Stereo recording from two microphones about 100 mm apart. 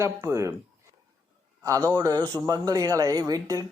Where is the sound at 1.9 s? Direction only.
35° right (ahead or behind).